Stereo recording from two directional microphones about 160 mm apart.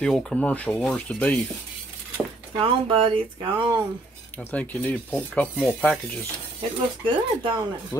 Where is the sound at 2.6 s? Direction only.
35° right (ahead or behind).